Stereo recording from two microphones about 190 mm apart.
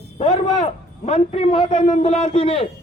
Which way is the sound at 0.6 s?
30° left (ahead or behind).